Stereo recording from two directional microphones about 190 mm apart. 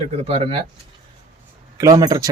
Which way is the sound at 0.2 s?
30° right (ahead or behind).